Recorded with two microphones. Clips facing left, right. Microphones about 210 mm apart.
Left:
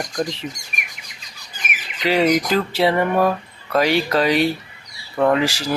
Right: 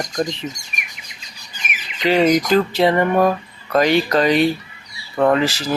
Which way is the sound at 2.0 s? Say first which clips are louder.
Right 2 dB; 5° left (ahead or behind).